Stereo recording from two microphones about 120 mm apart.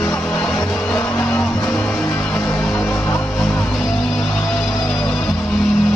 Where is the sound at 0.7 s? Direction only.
5° left (ahead or behind).